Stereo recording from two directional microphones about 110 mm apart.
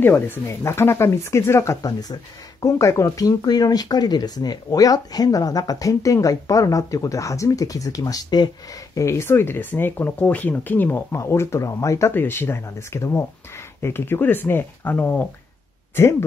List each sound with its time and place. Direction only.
0.0 s speech: 20° left (ahead or behind); by 8.5 s 35° left (ahead or behind)
8.9 s speech: 25° left (ahead or behind)